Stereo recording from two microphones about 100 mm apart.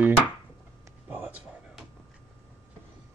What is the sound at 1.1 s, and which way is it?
Speech, 15° right (ahead or behind).